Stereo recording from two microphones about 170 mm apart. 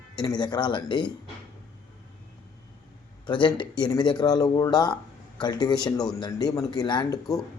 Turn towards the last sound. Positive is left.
turn(degrees=25)  # may be behind; listen again after turning